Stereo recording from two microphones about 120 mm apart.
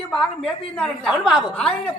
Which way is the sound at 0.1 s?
5° left (ahead or behind).